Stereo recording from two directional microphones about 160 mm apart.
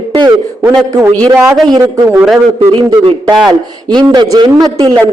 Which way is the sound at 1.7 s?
25° right (ahead or behind).